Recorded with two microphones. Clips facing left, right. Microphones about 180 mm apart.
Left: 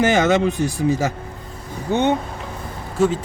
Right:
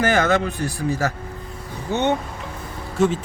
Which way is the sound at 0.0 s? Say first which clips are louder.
Left 3 dB; 20° left (ahead or behind).